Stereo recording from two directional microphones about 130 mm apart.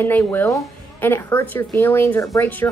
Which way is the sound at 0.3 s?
20° left (ahead or behind).